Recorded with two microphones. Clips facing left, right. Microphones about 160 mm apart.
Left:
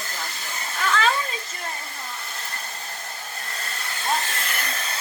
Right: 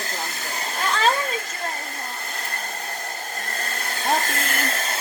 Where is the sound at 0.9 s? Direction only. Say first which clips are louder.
Right 1 dB; 35° right (ahead or behind).